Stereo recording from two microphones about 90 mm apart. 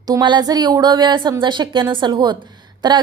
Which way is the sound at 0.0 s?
50° right (ahead or behind).